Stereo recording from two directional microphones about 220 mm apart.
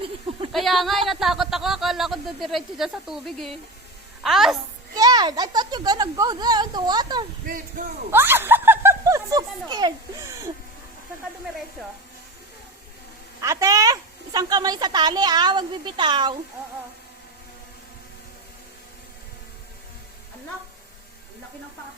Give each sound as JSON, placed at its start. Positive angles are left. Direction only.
{"t": 0.5, "sound": "a woman's voice", "side_deg": 0}
{"t": 4.9, "sound": "speech", "side_deg": -15}
{"t": 7.4, "sound": "speech", "side_deg": -40}
{"t": 8.1, "sound": "speech", "side_deg": -10}
{"t": 13.4, "sound": "speech", "side_deg": -15}